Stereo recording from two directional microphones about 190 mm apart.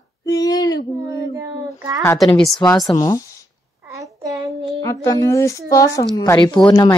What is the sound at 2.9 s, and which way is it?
Speech, 15° left (ahead or behind).